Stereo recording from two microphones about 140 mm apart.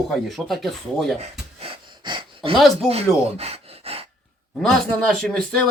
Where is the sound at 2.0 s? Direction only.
35° right (ahead or behind).